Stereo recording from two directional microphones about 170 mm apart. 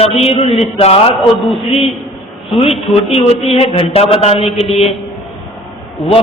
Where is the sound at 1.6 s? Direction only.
35° left (ahead or behind).